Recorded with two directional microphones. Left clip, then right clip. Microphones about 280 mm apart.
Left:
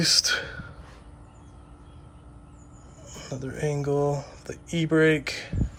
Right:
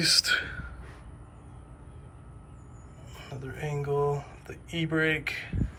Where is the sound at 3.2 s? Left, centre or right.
Centre.